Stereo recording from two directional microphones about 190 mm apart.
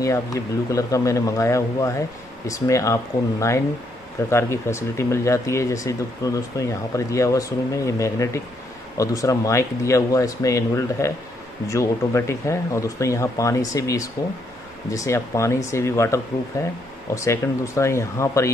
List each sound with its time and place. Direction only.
0.0 s speech: 15° left (ahead or behind)